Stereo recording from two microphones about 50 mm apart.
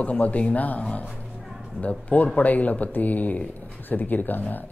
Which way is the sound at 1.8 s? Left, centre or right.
Left.